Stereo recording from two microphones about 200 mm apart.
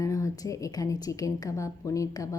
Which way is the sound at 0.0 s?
15° left (ahead or behind).